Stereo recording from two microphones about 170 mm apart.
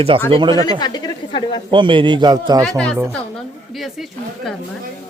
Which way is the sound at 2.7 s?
5° left (ahead or behind).